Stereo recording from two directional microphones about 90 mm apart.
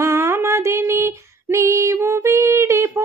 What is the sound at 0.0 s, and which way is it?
Female singing, 30° right (ahead or behind).